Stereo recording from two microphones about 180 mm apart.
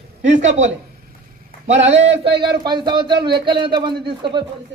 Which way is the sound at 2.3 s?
25° right (ahead or behind).